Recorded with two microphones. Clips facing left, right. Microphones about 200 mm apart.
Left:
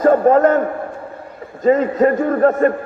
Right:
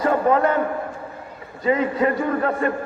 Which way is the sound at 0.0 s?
45° left (ahead or behind).